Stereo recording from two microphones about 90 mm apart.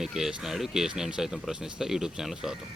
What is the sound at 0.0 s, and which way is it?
Speech, 5° right (ahead or behind).